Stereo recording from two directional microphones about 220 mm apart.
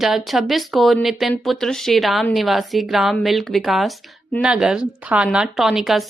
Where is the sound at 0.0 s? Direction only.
Centre (ahead or behind).